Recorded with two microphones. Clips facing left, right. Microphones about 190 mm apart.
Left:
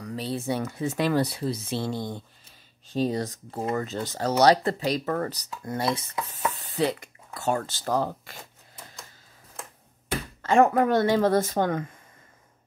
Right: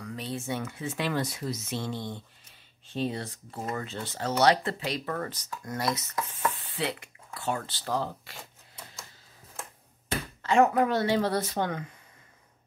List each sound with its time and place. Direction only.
0.0 s speech: 35° left (ahead or behind)
6.5 s speech: 40° left (ahead or behind)
10.4 s speech: 50° left (ahead or behind)